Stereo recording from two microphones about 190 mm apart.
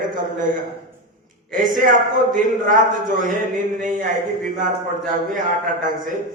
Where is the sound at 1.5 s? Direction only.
45° right (ahead or behind).